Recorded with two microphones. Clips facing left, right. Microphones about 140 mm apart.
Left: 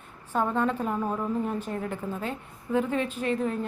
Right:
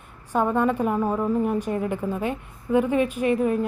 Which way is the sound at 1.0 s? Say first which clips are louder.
Right 5 dB; 35° right (ahead or behind).